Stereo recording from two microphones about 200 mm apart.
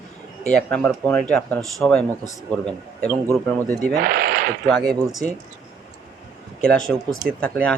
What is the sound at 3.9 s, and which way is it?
Speech, 50° right (ahead or behind).